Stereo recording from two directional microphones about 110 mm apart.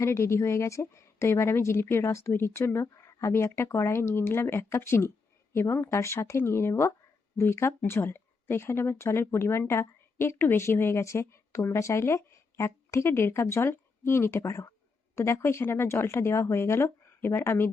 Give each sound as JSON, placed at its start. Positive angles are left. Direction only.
{"t": 0.0, "sound": "speech", "side_deg": 25}